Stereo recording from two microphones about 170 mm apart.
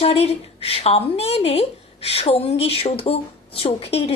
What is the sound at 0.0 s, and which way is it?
A woman's voice, 35° left (ahead or behind).